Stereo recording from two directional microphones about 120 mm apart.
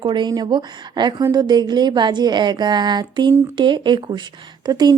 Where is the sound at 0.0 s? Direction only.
40° right (ahead or behind).